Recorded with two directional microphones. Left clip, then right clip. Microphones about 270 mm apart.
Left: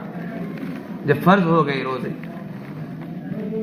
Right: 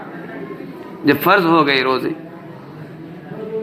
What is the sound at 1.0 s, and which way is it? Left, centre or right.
Speech, right.